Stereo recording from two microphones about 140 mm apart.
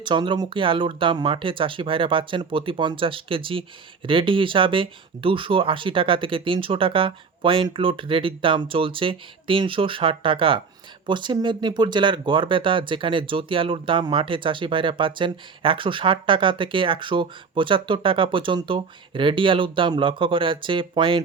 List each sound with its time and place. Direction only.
0.0 s speech: 35° right (ahead or behind)